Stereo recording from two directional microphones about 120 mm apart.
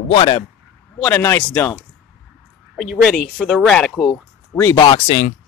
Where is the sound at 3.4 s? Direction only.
5° left (ahead or behind).